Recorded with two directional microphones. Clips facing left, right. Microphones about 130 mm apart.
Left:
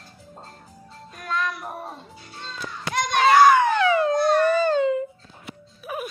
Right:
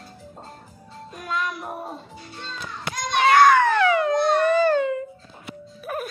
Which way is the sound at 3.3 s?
10° left (ahead or behind).